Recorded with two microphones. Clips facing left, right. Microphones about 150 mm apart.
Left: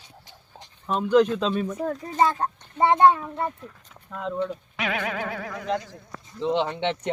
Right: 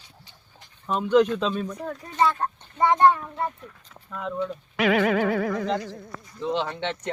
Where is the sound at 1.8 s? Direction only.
35° left (ahead or behind).